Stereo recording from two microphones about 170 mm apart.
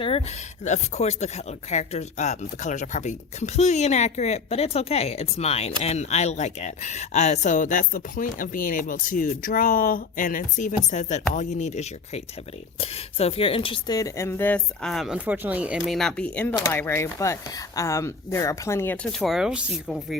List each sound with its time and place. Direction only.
0.6 s speech: 40° left (ahead or behind); by 18.9 s 15° left (ahead or behind)
19.2 s speech: centre (ahead or behind)